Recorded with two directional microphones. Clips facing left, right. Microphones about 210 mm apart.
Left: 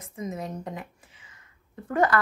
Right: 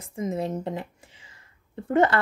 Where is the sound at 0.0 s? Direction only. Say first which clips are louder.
Right 5 dB; 30° right (ahead or behind).